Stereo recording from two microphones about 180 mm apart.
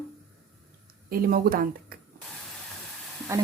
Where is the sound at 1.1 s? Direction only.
50° right (ahead or behind).